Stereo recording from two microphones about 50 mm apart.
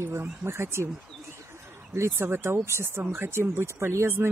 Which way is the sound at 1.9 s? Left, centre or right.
Right.